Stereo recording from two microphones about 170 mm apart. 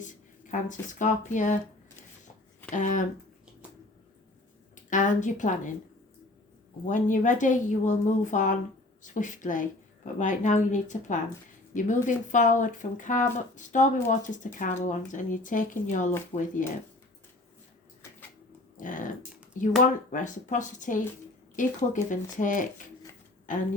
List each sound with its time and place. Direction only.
0.0 s speech: 50° left (ahead or behind)
2.6 s speech: 50° left (ahead or behind)
4.9 s speech: 50° left (ahead or behind)
6.8 s a woman's voice: 50° left (ahead or behind)
16.3 s speech: 40° left (ahead or behind)
18.8 s typing: 50° left (ahead or behind)
19.5 s speech: 50° left (ahead or behind)